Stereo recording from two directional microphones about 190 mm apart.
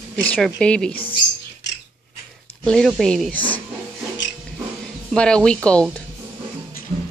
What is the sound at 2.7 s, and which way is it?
Speech, centre (ahead or behind).